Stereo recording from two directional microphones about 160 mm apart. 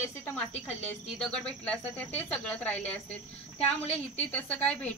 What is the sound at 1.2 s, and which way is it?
Speech, 5° left (ahead or behind).